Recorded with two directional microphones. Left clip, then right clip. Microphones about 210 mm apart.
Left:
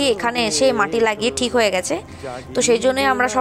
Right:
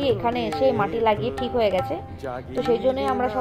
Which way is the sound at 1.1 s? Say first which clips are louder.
Left 4 dB; 50° left (ahead or behind).